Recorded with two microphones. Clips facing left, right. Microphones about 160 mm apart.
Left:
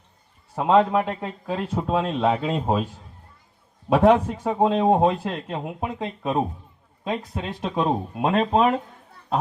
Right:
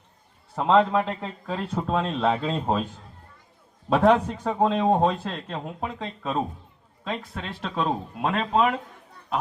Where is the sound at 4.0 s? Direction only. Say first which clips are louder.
Left 2 dB; 15° left (ahead or behind).